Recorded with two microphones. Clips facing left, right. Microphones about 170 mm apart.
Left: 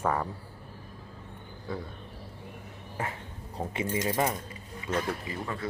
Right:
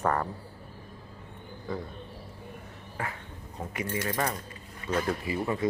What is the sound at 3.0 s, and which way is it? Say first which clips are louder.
Speech: left 1 dB; 20° left (ahead or behind).